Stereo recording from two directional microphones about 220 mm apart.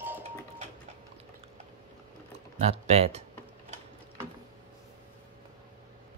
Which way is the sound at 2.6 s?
30° right (ahead or behind).